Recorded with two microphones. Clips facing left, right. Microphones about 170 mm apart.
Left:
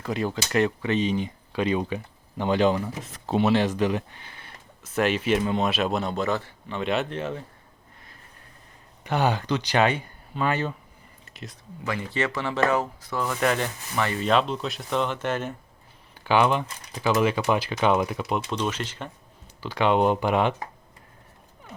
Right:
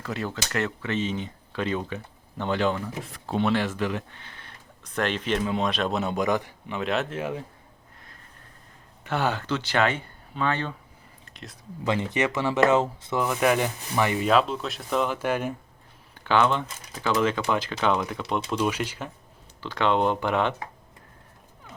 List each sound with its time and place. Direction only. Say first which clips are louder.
0.0 s speech: left 4 dB; 15° left (ahead or behind)
6.0 s speech: right 1 dB; 10° right (ahead or behind)
6.7 s speech: left 1 dB; centre (ahead or behind)
9.0 s speech: left 2 dB; 15° left (ahead or behind)
11.3 s a sound: left 3 dB; 5° left (ahead or behind)
11.9 s speech: right 3 dB; 20° right (ahead or behind)
14.3 s speech: right 1 dB; centre (ahead or behind)
16.2 s speech: left 1 dB; 15° left (ahead or behind)
18.5 s speech: right 2 dB; 5° right (ahead or behind)
19.6 s speech: left 2 dB; 10° left (ahead or behind)